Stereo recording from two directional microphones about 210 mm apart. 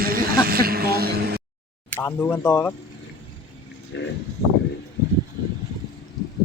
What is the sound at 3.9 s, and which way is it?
Speech, 55° left (ahead or behind).